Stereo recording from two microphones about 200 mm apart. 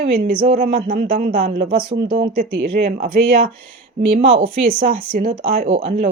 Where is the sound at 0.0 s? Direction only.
45° right (ahead or behind).